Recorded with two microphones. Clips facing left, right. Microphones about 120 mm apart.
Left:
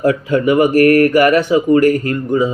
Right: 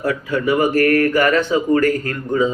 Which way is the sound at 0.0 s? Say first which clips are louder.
Left 6 dB; 20° left (ahead or behind).